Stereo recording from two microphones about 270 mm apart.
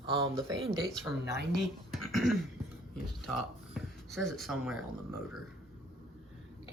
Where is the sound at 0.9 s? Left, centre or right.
Centre.